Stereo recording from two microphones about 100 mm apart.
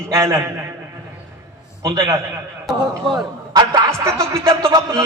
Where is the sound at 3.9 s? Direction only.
30° right (ahead or behind).